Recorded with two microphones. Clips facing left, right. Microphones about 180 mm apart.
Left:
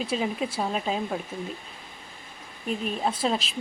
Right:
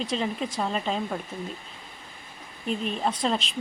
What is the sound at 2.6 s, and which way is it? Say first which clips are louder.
Speech: even; 5° left (ahead or behind).